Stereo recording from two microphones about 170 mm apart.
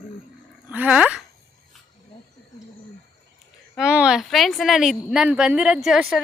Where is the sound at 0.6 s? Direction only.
10° right (ahead or behind).